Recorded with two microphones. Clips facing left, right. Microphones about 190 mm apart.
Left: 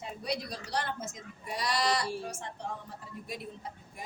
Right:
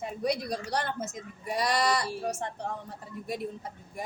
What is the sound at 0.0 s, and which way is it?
Speech, 50° right (ahead or behind).